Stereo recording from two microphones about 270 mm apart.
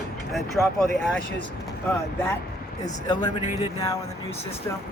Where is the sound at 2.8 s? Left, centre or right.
Centre.